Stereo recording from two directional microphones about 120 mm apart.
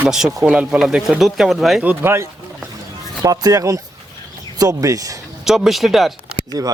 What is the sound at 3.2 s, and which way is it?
Speech, 30° right (ahead or behind).